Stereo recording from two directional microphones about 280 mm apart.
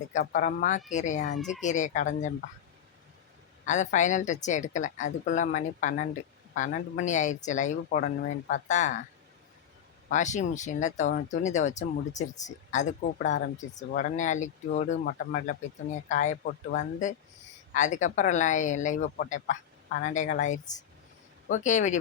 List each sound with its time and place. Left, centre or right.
0.1 s speech: left
3.7 s speech: left
10.1 s speech: left